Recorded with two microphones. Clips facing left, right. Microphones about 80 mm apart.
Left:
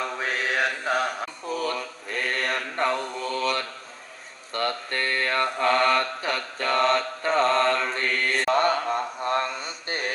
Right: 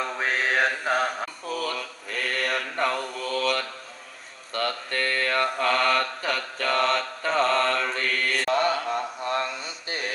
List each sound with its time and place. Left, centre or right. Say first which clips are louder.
0.2 s mantra: right 3 dB; right
1.6 s mantra: left 2 dB; left